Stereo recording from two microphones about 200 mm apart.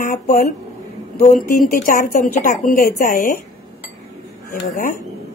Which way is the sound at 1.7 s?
45° left (ahead or behind).